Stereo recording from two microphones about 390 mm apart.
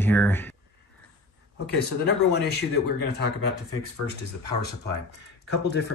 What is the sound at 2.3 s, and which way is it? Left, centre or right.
Speech, left.